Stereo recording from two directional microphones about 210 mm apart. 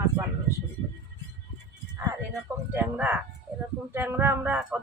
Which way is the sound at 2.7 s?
5° right (ahead or behind).